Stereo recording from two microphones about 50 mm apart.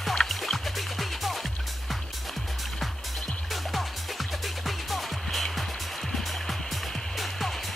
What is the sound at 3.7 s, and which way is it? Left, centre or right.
Music, centre.